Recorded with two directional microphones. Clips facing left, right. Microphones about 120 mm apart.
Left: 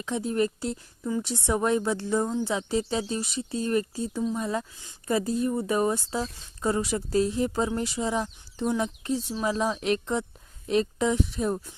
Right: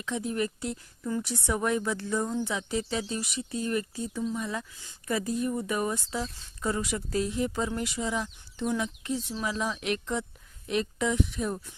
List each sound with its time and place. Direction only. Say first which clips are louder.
0.0 s a woman's voice: left 4 dB; 35° left (ahead or behind)
4.7 s speech: left 4 dB; 20° left (ahead or behind)